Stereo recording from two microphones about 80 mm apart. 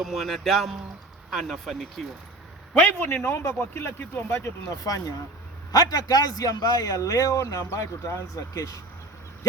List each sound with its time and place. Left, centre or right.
0.0 s speech: centre
2.7 s a man's voice: left